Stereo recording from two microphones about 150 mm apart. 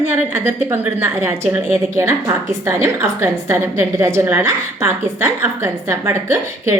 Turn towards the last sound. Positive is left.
turn(degrees=-20)  # may be behind; listen again after turning